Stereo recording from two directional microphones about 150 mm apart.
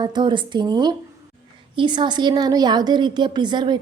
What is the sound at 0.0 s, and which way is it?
A woman's voice, 30° right (ahead or behind).